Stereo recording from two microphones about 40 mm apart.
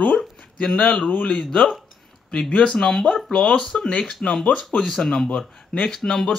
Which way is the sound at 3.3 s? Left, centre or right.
Left.